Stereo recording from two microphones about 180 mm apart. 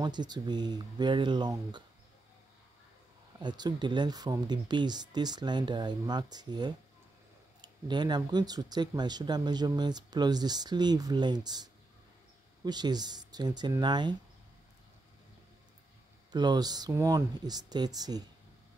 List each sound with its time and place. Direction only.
0.0 s speech: 25° right (ahead or behind)
3.3 s speech: 25° right (ahead or behind)
16.3 s speech: 25° right (ahead or behind)